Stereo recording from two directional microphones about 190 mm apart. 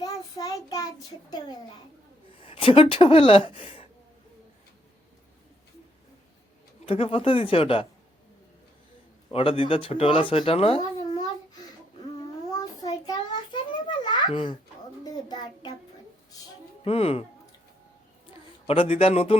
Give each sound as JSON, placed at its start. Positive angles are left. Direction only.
{"t": 0.0, "sound": "child singing", "side_deg": 20}
{"t": 1.3, "sound": "speech", "side_deg": 20}
{"t": 6.8, "sound": "speech", "side_deg": 30}
{"t": 9.3, "sound": "speech", "side_deg": 30}
{"t": 12.5, "sound": "a sound", "side_deg": 20}
{"t": 14.3, "sound": "a child's voice", "side_deg": 25}
{"t": 16.8, "sound": "speech", "side_deg": 30}
{"t": 18.7, "sound": "speech", "side_deg": 30}